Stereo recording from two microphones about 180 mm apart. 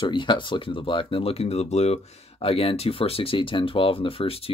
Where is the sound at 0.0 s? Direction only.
25° left (ahead or behind).